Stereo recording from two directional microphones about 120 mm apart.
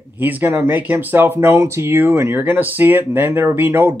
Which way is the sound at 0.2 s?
15° right (ahead or behind).